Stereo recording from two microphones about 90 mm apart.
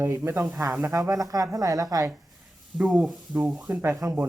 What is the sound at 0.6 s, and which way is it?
Speech, 30° right (ahead or behind).